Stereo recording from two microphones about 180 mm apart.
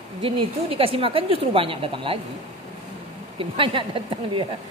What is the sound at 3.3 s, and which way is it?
A woman's voice, 30° right (ahead or behind).